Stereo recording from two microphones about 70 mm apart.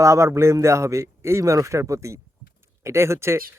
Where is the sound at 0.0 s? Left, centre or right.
Right.